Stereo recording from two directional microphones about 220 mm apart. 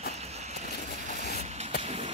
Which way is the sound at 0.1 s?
30° right (ahead or behind).